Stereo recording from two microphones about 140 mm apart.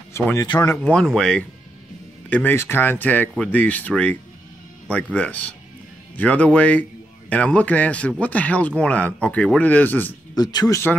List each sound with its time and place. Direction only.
0.1 s speech: 20° left (ahead or behind)
0.5 s speech: 30° left (ahead or behind)
0.8 s a man's voice: 5° left (ahead or behind)
10.3 s speech: 25° left (ahead or behind)